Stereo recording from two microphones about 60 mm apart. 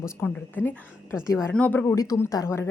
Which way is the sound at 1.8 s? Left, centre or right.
Left.